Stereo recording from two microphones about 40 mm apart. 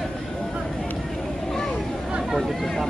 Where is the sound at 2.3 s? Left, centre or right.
Centre.